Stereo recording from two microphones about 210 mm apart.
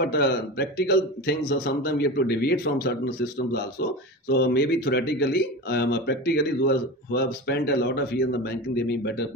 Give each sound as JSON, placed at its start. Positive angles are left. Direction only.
{"t": 0.0, "sound": "speech", "side_deg": 50}
{"t": 4.3, "sound": "speech", "side_deg": 50}